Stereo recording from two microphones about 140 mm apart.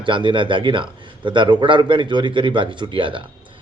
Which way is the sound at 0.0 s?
35° right (ahead or behind).